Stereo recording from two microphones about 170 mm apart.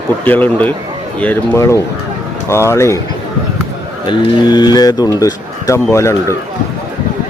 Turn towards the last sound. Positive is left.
turn(degrees=15)  # may be behind; listen again after turning